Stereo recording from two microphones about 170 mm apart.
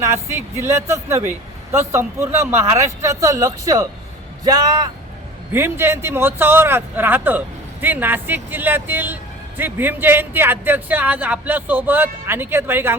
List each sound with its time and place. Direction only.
0.0 s speech: 15° right (ahead or behind)